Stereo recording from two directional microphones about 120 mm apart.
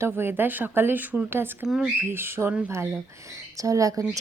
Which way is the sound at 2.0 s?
20° right (ahead or behind).